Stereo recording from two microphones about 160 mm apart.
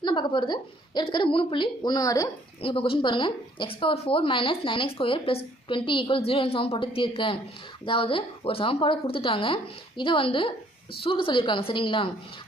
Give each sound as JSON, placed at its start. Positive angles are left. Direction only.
{"t": 0.0, "sound": "a woman's voice", "side_deg": 30}
{"t": 2.6, "sound": "speech", "side_deg": 35}